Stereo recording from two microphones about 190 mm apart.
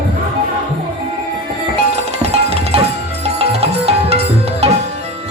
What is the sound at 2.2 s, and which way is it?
Music, 30° right (ahead or behind).